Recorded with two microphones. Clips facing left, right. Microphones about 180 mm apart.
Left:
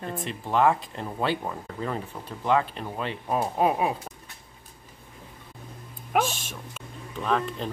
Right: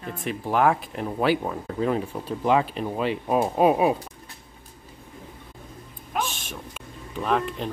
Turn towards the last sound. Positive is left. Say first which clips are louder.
# right 2 dB
turn(degrees=-5)  # may be behind; listen again after turning